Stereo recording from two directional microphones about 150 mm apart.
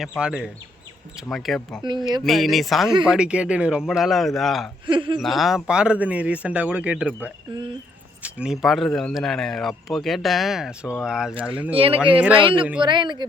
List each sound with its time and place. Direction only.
0.2 s speech: 5° right (ahead or behind)
4.9 s speech: 35° right (ahead or behind)
5.2 s speech: centre (ahead or behind)
11.7 s speech: 40° right (ahead or behind)
11.9 s speech: 10° right (ahead or behind)
12.4 s speech: 35° right (ahead or behind)